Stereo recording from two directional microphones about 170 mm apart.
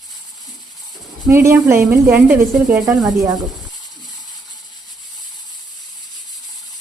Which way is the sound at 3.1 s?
20° right (ahead or behind).